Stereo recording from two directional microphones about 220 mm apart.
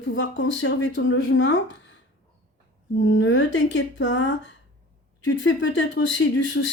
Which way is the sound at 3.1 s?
55° left (ahead or behind).